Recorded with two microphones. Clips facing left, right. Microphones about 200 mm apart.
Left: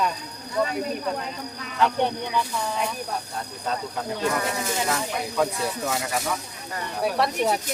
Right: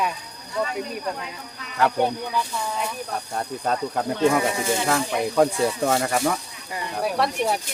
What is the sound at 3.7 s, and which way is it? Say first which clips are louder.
Speech: right 4 dB; 50° right (ahead or behind).